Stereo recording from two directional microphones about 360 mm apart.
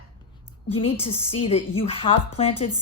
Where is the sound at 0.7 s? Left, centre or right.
Centre.